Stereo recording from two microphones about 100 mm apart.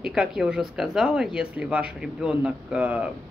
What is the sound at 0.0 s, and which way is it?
Speech, 5° right (ahead or behind).